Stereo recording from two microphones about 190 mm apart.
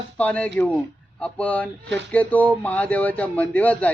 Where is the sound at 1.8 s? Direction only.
65° right (ahead or behind).